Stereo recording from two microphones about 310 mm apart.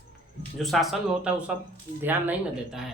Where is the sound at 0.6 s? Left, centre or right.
Centre.